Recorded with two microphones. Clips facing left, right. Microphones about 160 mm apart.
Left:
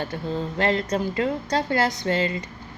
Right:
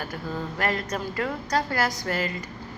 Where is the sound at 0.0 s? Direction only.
25° left (ahead or behind).